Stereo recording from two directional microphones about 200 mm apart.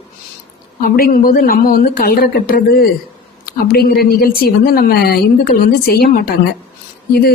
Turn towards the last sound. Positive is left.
turn(degrees=50)  # may be behind; listen again after turning